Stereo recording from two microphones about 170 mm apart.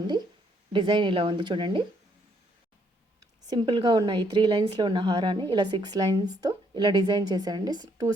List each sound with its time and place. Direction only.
0.7 s a woman's voice: 30° right (ahead or behind)
3.5 s a woman's voice: 25° right (ahead or behind)